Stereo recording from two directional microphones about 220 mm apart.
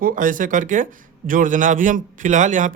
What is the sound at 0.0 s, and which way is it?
Speech, 35° right (ahead or behind).